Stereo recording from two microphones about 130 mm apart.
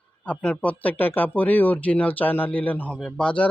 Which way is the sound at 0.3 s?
10° left (ahead or behind).